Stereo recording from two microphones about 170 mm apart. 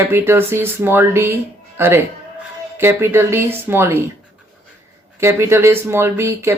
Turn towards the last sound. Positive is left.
turn(degrees=-15)  # may be behind; listen again after turning